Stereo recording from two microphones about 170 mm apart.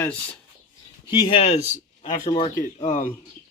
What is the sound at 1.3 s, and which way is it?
Speech, 40° left (ahead or behind).